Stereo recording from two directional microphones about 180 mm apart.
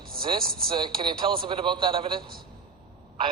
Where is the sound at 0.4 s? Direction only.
55° right (ahead or behind).